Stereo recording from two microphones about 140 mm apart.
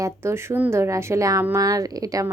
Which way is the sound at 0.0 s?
20° right (ahead or behind).